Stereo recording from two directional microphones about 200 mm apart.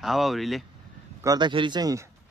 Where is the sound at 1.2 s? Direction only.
20° right (ahead or behind).